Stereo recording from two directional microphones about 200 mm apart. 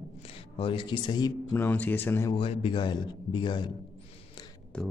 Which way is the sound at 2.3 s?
25° left (ahead or behind).